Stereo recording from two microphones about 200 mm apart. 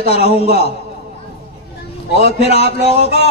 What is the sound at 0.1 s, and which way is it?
Speech, 30° left (ahead or behind).